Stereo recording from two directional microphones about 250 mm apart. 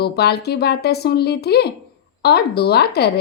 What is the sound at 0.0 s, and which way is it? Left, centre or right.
A woman's voice, left.